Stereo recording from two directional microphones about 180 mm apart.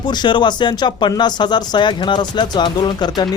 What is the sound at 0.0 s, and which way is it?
Speech, 25° left (ahead or behind).